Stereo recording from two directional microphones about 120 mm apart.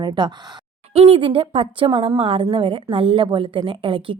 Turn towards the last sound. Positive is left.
turn(degrees=-45)  # may be behind; listen again after turning